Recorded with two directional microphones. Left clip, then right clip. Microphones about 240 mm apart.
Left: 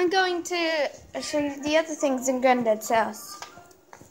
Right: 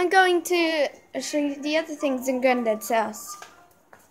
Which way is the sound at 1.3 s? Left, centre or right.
Centre.